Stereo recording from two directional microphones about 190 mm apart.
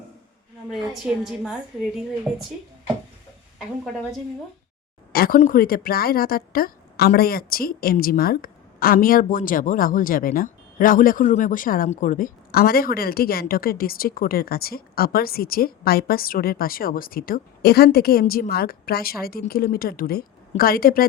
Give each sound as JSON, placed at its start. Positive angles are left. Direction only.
{"t": 0.7, "sound": "a woman's voice", "side_deg": 0}
{"t": 5.1, "sound": "a woman's voice", "side_deg": 50}